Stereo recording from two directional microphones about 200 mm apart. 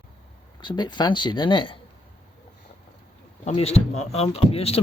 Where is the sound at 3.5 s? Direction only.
30° left (ahead or behind).